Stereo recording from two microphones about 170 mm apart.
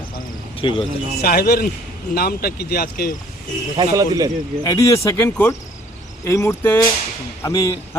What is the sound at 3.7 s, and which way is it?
Speech, 20° right (ahead or behind).